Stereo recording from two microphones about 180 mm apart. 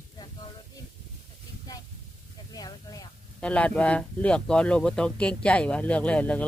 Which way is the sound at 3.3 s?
5° left (ahead or behind).